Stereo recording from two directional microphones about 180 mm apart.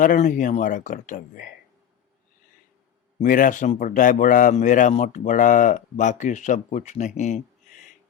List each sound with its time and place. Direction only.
0.0 s a man's voice: 45° left (ahead or behind)
3.2 s a man's voice: 50° left (ahead or behind)